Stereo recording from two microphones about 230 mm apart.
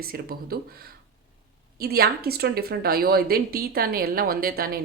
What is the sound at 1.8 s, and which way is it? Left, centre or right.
Speech, right.